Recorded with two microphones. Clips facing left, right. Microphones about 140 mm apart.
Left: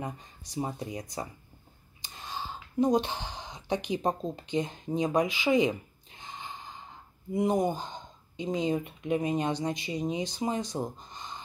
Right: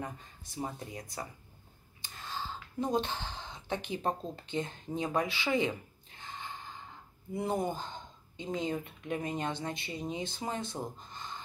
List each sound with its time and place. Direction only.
0.0 s speech: 20° left (ahead or behind)
2.0 s a sound: 20° left (ahead or behind)
7.3 s speech: 15° left (ahead or behind)